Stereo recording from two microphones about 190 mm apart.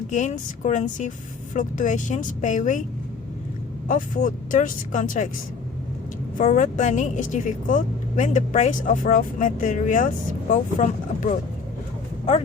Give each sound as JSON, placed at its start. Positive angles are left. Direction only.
{"t": 0.1, "sound": "a woman's voice", "side_deg": 40}
{"t": 3.8, "sound": "a woman's voice", "side_deg": 45}
{"t": 6.3, "sound": "a woman's voice", "side_deg": 45}